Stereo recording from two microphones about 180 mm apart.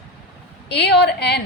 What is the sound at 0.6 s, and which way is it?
Speech, 65° left (ahead or behind).